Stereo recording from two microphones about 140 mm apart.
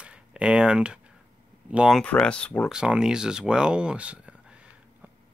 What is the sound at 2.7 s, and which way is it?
Speech, 5° right (ahead or behind).